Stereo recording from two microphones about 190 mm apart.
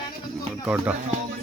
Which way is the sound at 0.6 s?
5° right (ahead or behind).